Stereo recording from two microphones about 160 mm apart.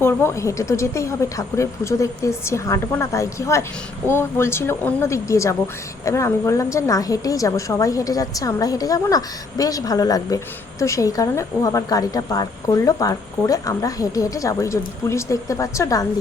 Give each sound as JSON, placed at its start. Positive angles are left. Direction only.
{"t": 0.0, "sound": "a woman's voice", "side_deg": 15}